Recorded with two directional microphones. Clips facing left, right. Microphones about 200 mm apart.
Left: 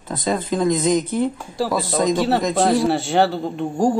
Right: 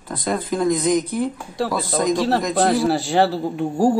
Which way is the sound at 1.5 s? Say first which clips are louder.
Left 1 dB; centre (ahead or behind).